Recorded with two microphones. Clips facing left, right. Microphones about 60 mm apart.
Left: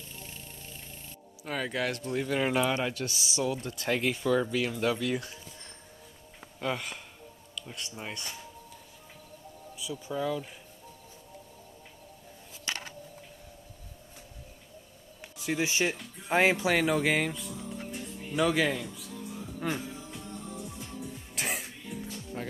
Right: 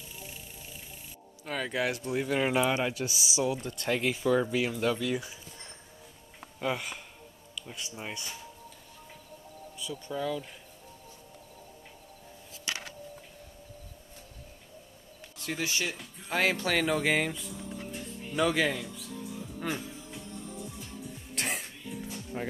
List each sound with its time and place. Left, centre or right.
0.0 s music: centre
1.4 s speech: centre
6.6 s speech: centre
9.8 s speech: centre
15.3 s a sound: centre
15.6 s speech: left; by 19.1 s centre
19.6 s music: centre
21.4 s music: centre
22.3 s speech: centre